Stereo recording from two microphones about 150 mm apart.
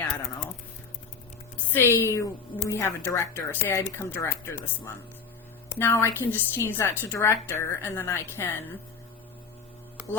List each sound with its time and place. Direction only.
1.7 s a woman's voice: 15° left (ahead or behind)